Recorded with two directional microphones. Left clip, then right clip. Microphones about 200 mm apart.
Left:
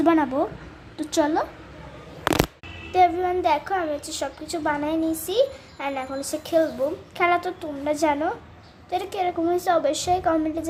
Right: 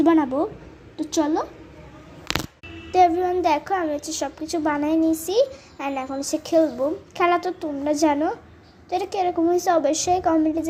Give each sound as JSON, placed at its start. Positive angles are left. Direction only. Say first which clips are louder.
{"t": 0.0, "sound": "a child's voice", "louder": "right 1 dB", "side_deg": -5}
{"t": 2.9, "sound": "a child's voice", "louder": "right 2 dB", "side_deg": -20}